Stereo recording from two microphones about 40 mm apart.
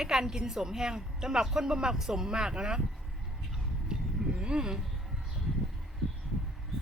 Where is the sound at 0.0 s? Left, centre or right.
Centre.